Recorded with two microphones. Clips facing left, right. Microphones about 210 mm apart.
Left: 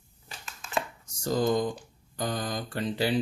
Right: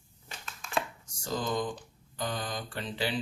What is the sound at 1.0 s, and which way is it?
Speech, 40° left (ahead or behind).